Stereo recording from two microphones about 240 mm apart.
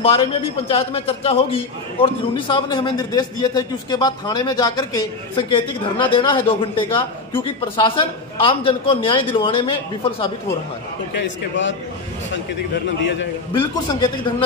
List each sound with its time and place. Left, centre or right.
0.7 s a man's voice: left
11.1 s a man's voice: left
12.7 s a man's voice: left
13.5 s a man's voice: centre